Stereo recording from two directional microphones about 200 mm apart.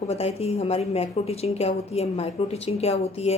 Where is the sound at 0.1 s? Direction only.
30° left (ahead or behind).